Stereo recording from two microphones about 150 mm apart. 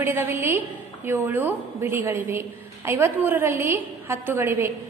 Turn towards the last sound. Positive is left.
turn(degrees=-15)  # may be behind; listen again after turning